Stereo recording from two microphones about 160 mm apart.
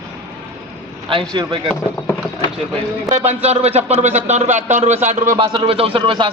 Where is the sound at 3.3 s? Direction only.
40° right (ahead or behind).